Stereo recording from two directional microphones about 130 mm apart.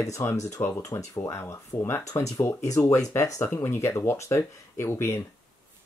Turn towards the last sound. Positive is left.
turn(degrees=20)  # may be behind; listen again after turning